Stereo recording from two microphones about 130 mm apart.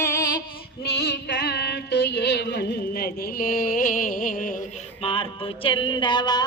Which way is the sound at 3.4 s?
90° left.